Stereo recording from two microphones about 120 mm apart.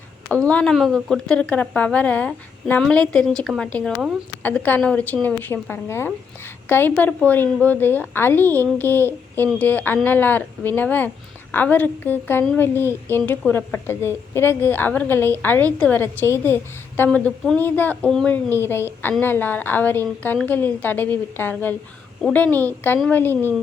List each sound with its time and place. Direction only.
0.3 s a woman's voice: 10° left (ahead or behind)
17.1 s a woman's voice: 10° left (ahead or behind)
18.6 s a woman's voice: 20° left (ahead or behind)